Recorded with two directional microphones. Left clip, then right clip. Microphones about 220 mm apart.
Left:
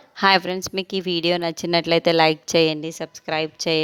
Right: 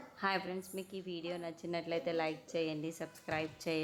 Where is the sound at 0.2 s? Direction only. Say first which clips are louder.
Left 19 dB; 45° left (ahead or behind).